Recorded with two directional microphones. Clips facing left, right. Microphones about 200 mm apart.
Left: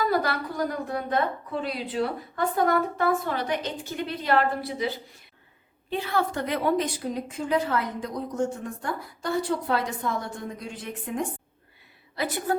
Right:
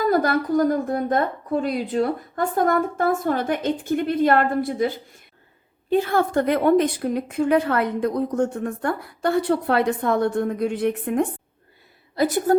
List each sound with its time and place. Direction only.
0.0 s a woman's voice: 45° right (ahead or behind)
12.1 s a woman's voice: 45° right (ahead or behind)